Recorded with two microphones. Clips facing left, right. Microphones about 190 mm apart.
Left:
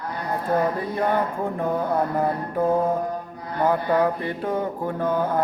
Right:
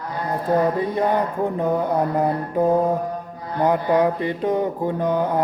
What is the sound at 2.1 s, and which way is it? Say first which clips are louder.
Mantra: right 3 dB; 20° right (ahead or behind).